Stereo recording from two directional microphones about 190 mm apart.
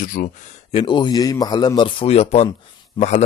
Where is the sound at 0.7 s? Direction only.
25° left (ahead or behind).